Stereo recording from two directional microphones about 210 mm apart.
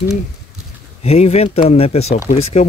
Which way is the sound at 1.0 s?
30° left (ahead or behind).